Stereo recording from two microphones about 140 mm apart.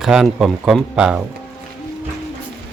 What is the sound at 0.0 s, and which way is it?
Speech, 5° right (ahead or behind).